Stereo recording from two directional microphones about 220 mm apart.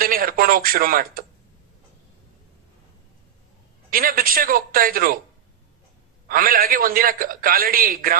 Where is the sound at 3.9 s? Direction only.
40° right (ahead or behind).